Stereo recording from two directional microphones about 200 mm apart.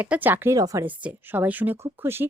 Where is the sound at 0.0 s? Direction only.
10° right (ahead or behind).